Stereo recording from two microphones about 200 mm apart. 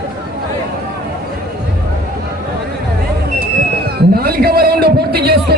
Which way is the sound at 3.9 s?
50° right (ahead or behind).